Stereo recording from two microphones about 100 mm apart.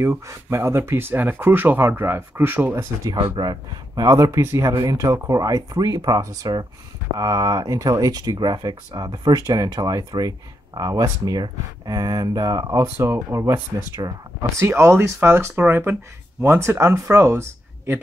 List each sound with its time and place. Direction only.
0.0 s speech: 30° right (ahead or behind)
3.2 s speech: 45° right (ahead or behind); by 18.0 s 25° right (ahead or behind)